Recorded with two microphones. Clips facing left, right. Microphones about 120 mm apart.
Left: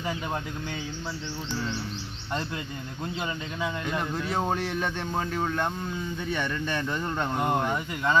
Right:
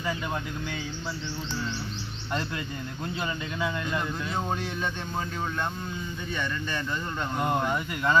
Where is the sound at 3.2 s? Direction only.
25° left (ahead or behind).